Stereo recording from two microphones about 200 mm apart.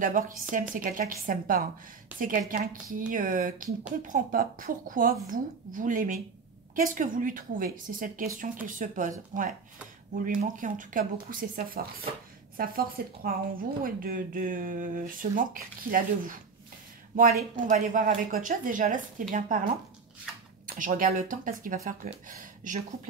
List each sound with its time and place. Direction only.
0.0 s speech: 40° right (ahead or behind)